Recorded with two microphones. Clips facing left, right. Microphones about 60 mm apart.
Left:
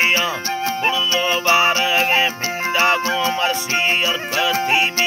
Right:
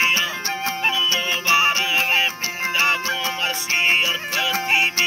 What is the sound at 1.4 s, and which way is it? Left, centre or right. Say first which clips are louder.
Music: left 2 dB; left.